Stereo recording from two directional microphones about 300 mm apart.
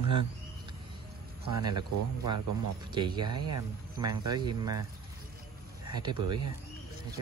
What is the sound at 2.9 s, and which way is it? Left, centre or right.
Speech, centre.